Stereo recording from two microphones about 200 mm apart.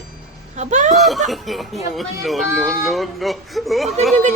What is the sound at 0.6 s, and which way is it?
Speech, 35° right (ahead or behind).